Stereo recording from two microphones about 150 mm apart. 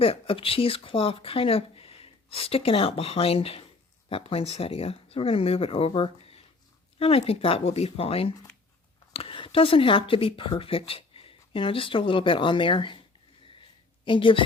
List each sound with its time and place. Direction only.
0.0 s speech: 40° left (ahead or behind)
14.0 s a woman's voice: 35° left (ahead or behind)